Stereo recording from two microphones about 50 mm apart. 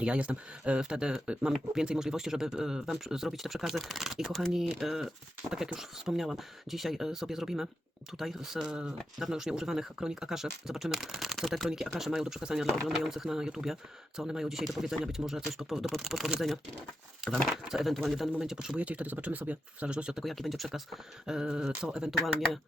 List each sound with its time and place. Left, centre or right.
0.0 s speech: right; by 16.3 s centre
17.2 s speech: centre
17.7 s speech: centre
18.3 s speech: centre
18.8 s speech: right
20.2 s speech: centre
21.2 s speech: centre